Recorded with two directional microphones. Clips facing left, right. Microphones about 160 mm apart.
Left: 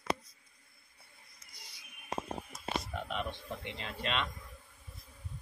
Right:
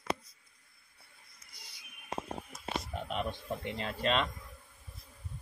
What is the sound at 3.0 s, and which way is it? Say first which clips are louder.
Speech: right 3 dB; 40° right (ahead or behind).